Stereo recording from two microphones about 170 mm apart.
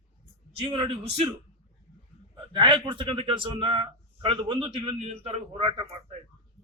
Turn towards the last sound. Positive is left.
turn(degrees=-30)  # may be behind; listen again after turning